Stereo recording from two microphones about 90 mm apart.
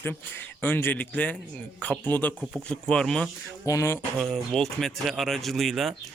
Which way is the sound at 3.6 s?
35° left (ahead or behind).